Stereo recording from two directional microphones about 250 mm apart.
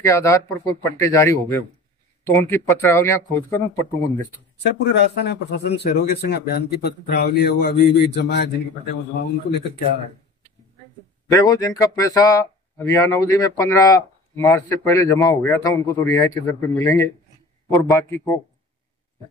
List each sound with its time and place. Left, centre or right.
0.0 s speech: centre
4.6 s speech: left
11.3 s speech: centre